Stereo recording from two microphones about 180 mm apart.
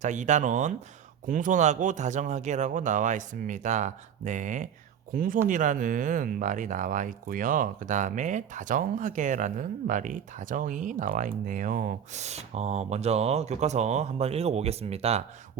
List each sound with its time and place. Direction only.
0.0 s speech: 40° right (ahead or behind)